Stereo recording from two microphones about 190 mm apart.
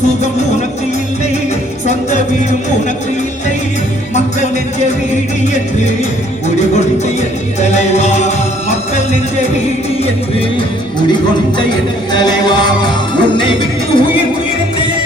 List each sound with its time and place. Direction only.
1.9 s music: 40° left (ahead or behind)
6.6 s music: 35° left (ahead or behind)
12.1 s music: 20° left (ahead or behind)